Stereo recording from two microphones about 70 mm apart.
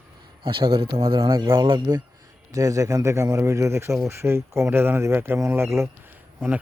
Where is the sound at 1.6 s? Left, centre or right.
Right.